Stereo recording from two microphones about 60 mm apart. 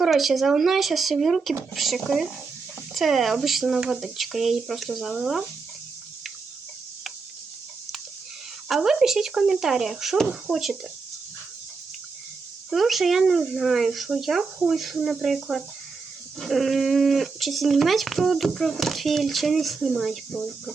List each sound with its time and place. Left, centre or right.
0.0 s speech: centre
8.6 s speech: centre
12.7 s speech: centre